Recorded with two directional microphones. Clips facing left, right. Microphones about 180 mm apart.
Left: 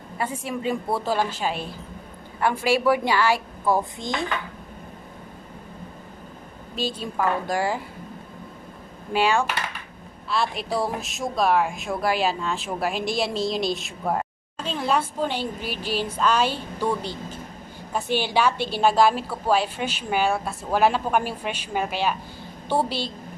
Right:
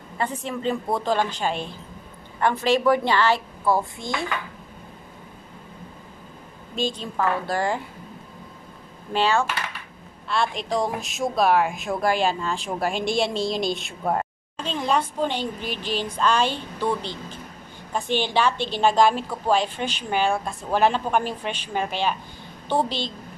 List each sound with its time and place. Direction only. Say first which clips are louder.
0.2 s a woman's voice: right 1 dB; 10° left (ahead or behind)
6.7 s a woman's voice: right 1 dB; 5° left (ahead or behind)
9.1 s a woman's voice: even; 15° left (ahead or behind)